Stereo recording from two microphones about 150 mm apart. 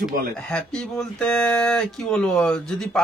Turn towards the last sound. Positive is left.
turn(degrees=5)  # may be behind; listen again after turning